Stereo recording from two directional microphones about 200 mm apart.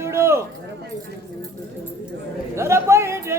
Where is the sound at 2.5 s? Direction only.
15° right (ahead or behind).